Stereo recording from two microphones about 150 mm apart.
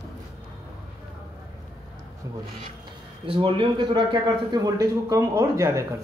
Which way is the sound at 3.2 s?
35° right (ahead or behind).